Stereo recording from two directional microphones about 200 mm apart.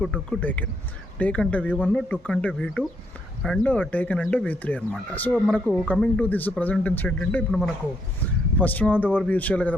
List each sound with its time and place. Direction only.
0.0 s speech: 5° left (ahead or behind)